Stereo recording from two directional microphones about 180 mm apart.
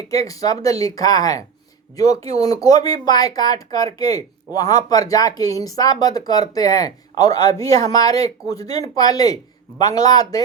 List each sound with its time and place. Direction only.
0.1 s speech: 20° left (ahead or behind)